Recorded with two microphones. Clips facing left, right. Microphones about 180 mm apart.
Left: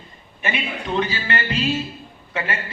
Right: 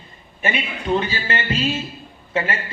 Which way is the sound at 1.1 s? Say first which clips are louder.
Right 1 dB; 30° right (ahead or behind).